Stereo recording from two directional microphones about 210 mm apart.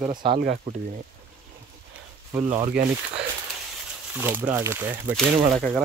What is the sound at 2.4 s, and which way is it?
Speech, 25° right (ahead or behind).